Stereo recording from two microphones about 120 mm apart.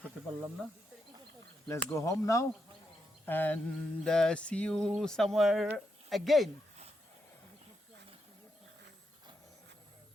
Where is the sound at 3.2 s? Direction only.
15° left (ahead or behind).